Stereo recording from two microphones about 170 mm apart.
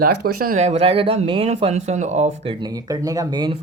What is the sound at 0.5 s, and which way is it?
Speech, 40° right (ahead or behind).